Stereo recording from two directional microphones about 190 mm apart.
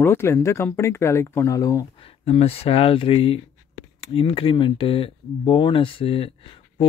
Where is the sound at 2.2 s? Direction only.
30° left (ahead or behind).